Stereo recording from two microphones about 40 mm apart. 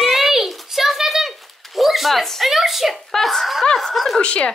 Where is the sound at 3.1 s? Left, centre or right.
Centre.